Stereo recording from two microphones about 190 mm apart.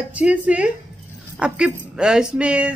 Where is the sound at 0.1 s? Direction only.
5° right (ahead or behind).